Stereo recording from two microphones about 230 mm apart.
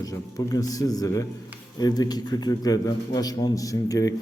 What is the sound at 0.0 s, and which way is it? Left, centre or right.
A man's voice, centre.